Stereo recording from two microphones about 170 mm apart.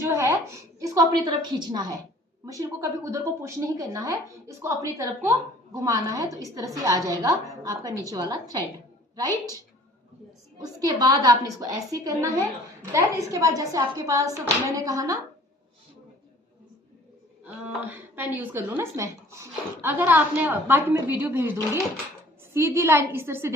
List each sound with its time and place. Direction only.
0.0 s a sound: 15° right (ahead or behind)
0.8 s a woman's voice: 20° right (ahead or behind)
10.6 s a woman's voice: 20° right (ahead or behind)
17.4 s a woman's voice: 10° right (ahead or behind)